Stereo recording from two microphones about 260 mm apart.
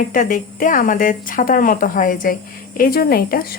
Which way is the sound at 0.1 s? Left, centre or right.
Left.